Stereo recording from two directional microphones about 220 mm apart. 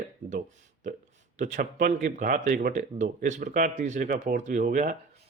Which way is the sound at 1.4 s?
40° right (ahead or behind).